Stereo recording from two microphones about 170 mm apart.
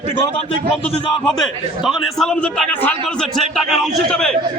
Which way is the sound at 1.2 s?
Centre (ahead or behind).